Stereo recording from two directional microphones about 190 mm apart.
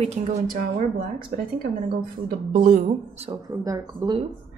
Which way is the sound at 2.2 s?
45° right (ahead or behind).